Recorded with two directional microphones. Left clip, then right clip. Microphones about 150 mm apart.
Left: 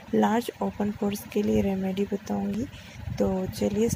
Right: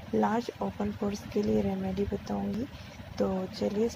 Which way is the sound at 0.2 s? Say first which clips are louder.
Left 4 dB; 30° left (ahead or behind).